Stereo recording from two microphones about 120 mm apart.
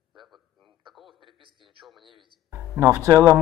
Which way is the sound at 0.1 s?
Centre (ahead or behind).